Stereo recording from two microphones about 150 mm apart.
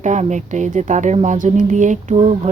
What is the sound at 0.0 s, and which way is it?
Speech, 50° right (ahead or behind).